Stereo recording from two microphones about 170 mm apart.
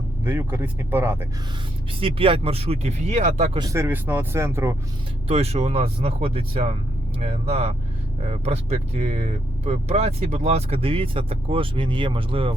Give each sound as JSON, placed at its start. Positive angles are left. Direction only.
{"t": 0.3, "sound": "speech", "side_deg": -15}
{"t": 2.0, "sound": "speech", "side_deg": -30}
{"t": 3.6, "sound": "speech", "side_deg": -15}
{"t": 5.3, "sound": "speech", "side_deg": -35}